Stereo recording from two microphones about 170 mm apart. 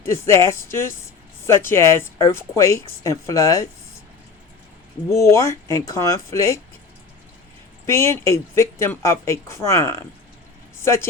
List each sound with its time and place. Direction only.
0.0 s speech: 15° left (ahead or behind)
5.0 s speech: 15° left (ahead or behind)
7.9 s speech: 15° left (ahead or behind)